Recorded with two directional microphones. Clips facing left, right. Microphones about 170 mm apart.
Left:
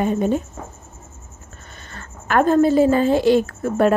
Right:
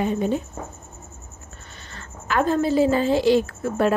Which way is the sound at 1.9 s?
50° left (ahead or behind).